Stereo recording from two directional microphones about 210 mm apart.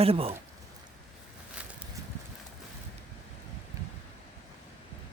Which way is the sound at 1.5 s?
5° right (ahead or behind).